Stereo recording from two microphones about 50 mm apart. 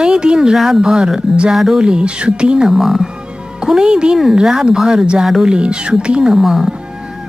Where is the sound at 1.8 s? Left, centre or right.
Centre.